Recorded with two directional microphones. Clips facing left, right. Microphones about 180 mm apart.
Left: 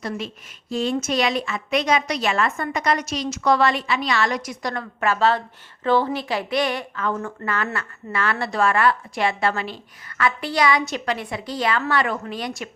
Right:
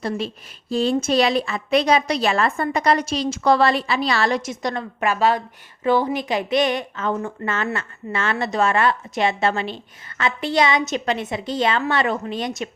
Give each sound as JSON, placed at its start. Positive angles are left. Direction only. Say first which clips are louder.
{"t": 0.7, "sound": "a woman's voice", "louder": "right 4 dB", "side_deg": -35}